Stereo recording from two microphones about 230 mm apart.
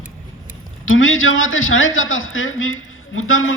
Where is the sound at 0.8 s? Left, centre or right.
Left.